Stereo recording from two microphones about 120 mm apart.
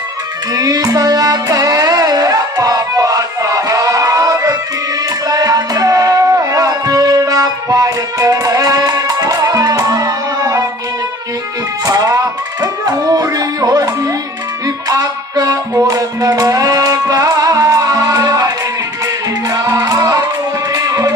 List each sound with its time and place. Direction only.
0.5 s music: 30° right (ahead or behind)
11.9 s music: 30° right (ahead or behind)